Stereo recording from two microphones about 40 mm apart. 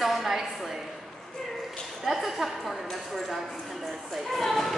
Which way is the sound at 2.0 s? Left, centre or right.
Centre.